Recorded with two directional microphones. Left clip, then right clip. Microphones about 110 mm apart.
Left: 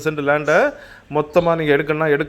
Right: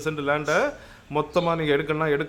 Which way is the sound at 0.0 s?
35° left (ahead or behind).